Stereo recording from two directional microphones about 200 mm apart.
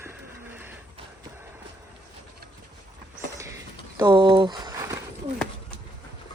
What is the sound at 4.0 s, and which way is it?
Speech, 20° right (ahead or behind).